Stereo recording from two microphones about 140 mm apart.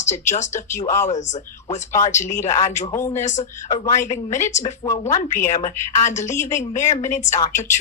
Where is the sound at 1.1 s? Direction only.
55° left (ahead or behind).